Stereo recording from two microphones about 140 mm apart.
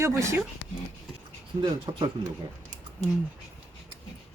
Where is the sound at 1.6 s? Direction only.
40° right (ahead or behind).